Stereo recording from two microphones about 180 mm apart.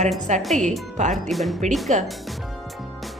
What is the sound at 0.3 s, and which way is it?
Speech, 40° right (ahead or behind).